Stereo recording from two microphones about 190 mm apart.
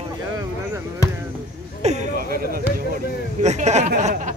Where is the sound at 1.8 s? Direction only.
35° right (ahead or behind).